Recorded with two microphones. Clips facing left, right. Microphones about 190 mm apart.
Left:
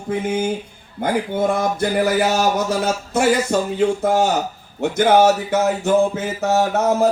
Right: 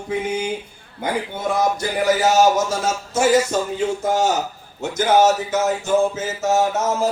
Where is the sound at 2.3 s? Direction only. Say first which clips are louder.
Right 2 dB; 60° left (ahead or behind).